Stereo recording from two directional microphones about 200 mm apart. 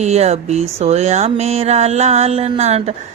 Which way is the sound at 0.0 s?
35° right (ahead or behind).